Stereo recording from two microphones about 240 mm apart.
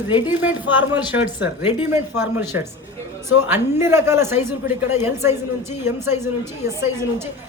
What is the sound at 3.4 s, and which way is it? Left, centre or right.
A woman's voice, centre.